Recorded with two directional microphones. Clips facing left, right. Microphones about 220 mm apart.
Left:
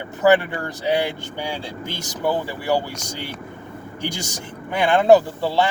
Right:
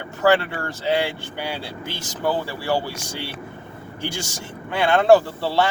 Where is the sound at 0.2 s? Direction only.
20° left (ahead or behind).